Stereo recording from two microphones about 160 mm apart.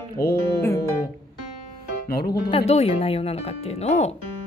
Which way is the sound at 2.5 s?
40° left (ahead or behind).